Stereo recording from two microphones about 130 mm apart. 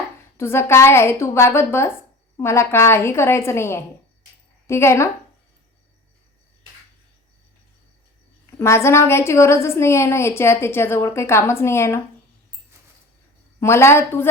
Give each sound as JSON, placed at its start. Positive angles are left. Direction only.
{"t": 0.3, "sound": "a woman's voice", "side_deg": 20}
{"t": 8.5, "sound": "a woman's voice", "side_deg": 20}
{"t": 13.6, "sound": "a woman's voice", "side_deg": 20}